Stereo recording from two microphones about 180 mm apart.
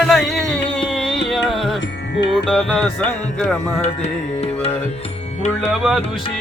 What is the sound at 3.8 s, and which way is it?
Music, 35° left (ahead or behind).